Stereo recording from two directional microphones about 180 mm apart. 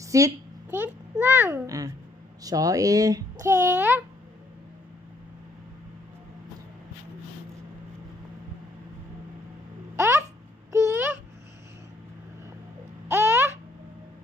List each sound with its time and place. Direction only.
0.0 s a sound: 20° right (ahead or behind)
0.7 s a child's voice: 10° right (ahead or behind)
9.9 s babbling: 15° right (ahead or behind)
13.1 s babbling: 15° right (ahead or behind)